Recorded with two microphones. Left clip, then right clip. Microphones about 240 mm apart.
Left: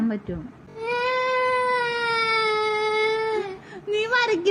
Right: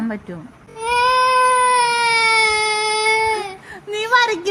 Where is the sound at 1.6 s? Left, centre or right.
Centre.